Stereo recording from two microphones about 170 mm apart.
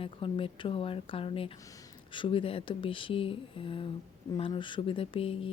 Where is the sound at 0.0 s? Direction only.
30° left (ahead or behind).